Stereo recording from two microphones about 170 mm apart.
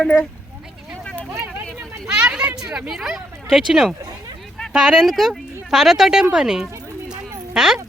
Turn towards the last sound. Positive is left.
turn(degrees=-5)  # may be behind; listen again after turning